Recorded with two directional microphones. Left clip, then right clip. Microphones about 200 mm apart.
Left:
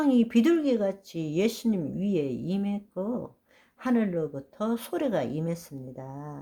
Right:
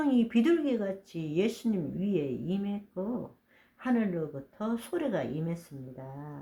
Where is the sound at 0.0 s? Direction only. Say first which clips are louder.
Left 4 dB; 35° left (ahead or behind).